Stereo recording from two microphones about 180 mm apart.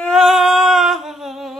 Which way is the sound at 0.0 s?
Centre (ahead or behind).